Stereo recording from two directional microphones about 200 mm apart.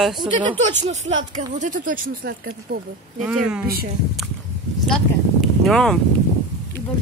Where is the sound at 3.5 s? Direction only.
5° right (ahead or behind).